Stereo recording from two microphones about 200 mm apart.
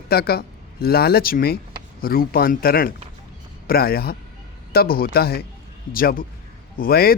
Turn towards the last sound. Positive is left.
turn(degrees=50)  # may be behind; listen again after turning